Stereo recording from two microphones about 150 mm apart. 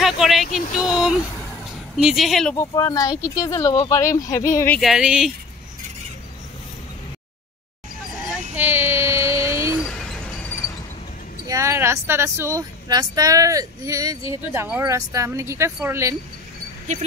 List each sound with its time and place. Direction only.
0.0 s vehicle: centre (ahead or behind)
0.7 s speech: 5° right (ahead or behind)
2.5 s speech: 25° left (ahead or behind)
4.7 s speech: centre (ahead or behind)
8.5 s a sound: 15° right (ahead or behind)
11.4 s speech: 20° right (ahead or behind)